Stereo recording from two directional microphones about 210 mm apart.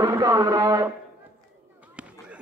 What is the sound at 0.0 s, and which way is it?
Speech, 20° right (ahead or behind).